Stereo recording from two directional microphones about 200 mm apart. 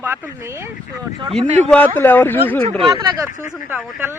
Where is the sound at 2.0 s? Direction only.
10° left (ahead or behind).